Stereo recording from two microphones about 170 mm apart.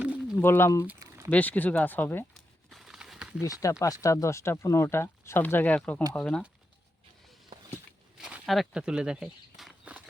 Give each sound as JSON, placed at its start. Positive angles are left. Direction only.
{"t": 0.0, "sound": "pigeon", "side_deg": -10}
{"t": 0.3, "sound": "speech", "side_deg": 15}
{"t": 0.9, "sound": "a sound", "side_deg": -15}
{"t": 1.3, "sound": "speech", "side_deg": 10}
{"t": 2.3, "sound": "a sound", "side_deg": 0}
{"t": 3.4, "sound": "speech", "side_deg": 20}
{"t": 8.2, "sound": "walk", "side_deg": 0}